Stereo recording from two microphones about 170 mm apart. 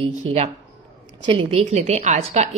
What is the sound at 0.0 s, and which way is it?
A woman's voice, 40° right (ahead or behind).